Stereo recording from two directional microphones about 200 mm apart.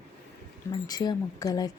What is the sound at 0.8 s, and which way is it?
Speech, 20° left (ahead or behind).